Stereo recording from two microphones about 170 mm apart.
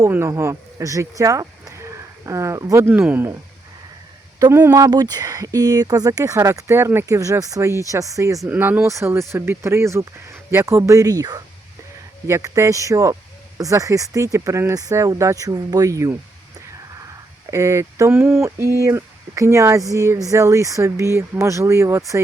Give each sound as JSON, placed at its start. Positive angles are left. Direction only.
{"t": 0.0, "sound": "speech", "side_deg": -15}
{"t": 4.4, "sound": "speech", "side_deg": -15}
{"t": 17.5, "sound": "speech", "side_deg": -15}